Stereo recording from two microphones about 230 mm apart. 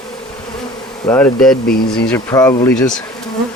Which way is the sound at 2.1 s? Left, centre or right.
Centre.